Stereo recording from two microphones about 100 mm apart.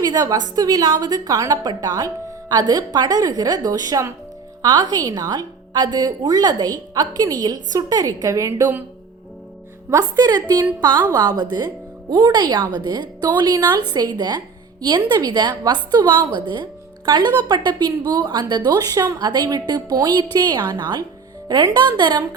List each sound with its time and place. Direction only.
0.0 s a woman's voice: 40° right (ahead or behind)
9.9 s a woman's voice: 40° right (ahead or behind)